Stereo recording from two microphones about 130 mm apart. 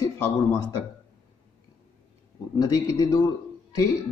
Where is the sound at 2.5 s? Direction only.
25° left (ahead or behind).